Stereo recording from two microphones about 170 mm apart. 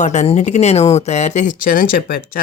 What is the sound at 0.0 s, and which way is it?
Speech, 45° left (ahead or behind).